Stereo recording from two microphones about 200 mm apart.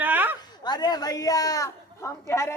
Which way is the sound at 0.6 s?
20° left (ahead or behind).